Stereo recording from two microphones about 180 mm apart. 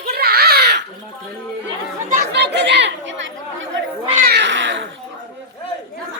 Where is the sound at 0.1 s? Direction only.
60° right (ahead or behind).